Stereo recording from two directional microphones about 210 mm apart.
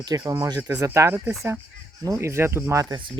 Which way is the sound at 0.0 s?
20° right (ahead or behind).